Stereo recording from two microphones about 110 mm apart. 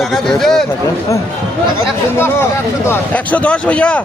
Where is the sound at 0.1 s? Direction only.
5° left (ahead or behind).